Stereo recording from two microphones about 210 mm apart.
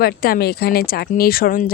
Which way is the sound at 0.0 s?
45° left (ahead or behind).